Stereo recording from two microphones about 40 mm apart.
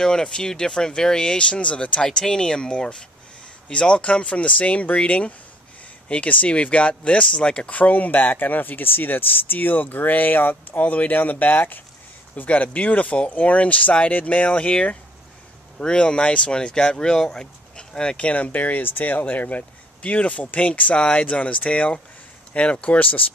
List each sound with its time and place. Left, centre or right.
0.0 s speech: centre
2.0 s speech: centre
7.7 s speech: left
12.4 s speech: left